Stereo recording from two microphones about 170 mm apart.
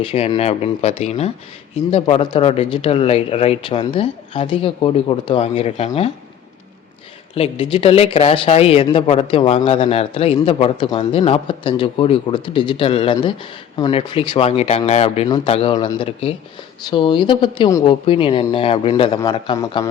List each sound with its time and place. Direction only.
0.0 s speech: 35° left (ahead or behind)
7.3 s speech: 35° left (ahead or behind)
17.7 s speech: 20° left (ahead or behind)
18.0 s speech: 30° left (ahead or behind)
19.5 s speech: 20° left (ahead or behind)